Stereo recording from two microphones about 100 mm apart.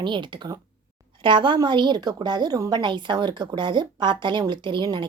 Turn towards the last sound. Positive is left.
turn(degrees=-50)  # may be behind; listen again after turning